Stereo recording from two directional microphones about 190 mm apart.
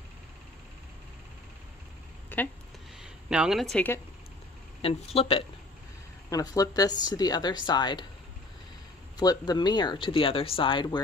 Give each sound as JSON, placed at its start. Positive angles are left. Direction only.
{"t": 2.2, "sound": "a sound", "side_deg": 10}
{"t": 3.0, "sound": "speech", "side_deg": -5}
{"t": 4.8, "sound": "speech", "side_deg": 30}
{"t": 6.3, "sound": "speech", "side_deg": 20}
{"t": 9.1, "sound": "speech", "side_deg": 20}